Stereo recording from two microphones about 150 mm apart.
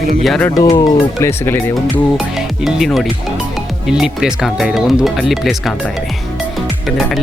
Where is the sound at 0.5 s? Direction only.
25° left (ahead or behind).